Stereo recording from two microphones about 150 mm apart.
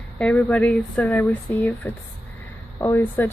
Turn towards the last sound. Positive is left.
turn(degrees=15)  # may be behind; listen again after turning